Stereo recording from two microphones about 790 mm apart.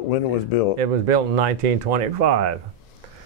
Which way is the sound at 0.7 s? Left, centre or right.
Right.